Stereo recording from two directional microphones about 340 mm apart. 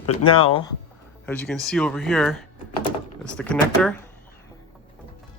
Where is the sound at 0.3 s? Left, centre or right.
Centre.